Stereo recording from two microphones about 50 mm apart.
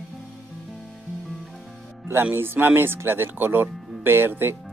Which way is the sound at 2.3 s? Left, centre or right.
Right.